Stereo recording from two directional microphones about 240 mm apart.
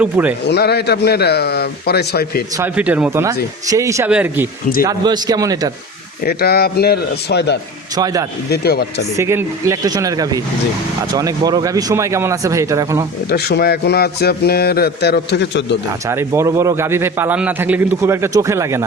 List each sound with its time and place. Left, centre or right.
0.0 s a man's voice: centre
0.4 s a man's voice: left
2.6 s a man's voice: centre
6.2 s a man's voice: left
7.9 s a man's voice: centre
8.4 s a man's voice: left
9.1 s a man's voice: centre
13.3 s a man's voice: left
15.9 s a man's voice: centre